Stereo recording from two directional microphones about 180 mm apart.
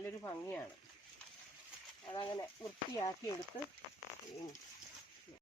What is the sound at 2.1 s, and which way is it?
Speech, 25° left (ahead or behind).